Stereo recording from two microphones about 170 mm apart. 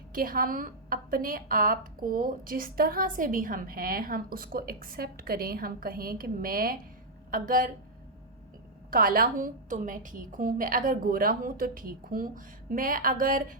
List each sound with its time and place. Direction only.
0.1 s a woman's voice: 55° right (ahead or behind)
8.9 s a woman's voice: 60° right (ahead or behind)